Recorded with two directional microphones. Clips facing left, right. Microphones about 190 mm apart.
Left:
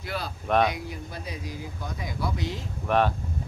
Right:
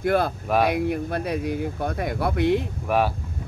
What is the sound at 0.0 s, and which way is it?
Speech, 55° right (ahead or behind).